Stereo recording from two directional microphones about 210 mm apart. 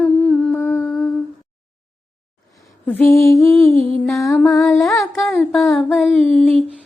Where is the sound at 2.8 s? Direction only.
10° left (ahead or behind).